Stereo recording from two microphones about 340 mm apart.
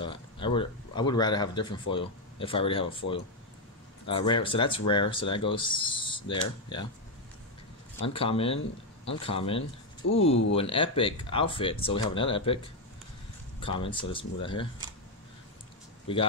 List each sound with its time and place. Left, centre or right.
0.0 s speech: centre
4.1 s speech: centre
8.1 s speech: centre
13.6 s speech: centre
16.1 s speech: centre